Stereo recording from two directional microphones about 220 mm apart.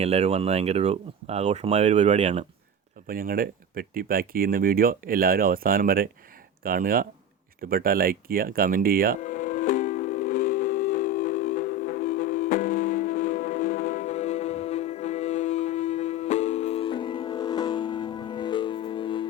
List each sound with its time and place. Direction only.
0.0 s speech: 30° right (ahead or behind)
3.1 s speech: 40° right (ahead or behind)
9.2 s music: 35° left (ahead or behind)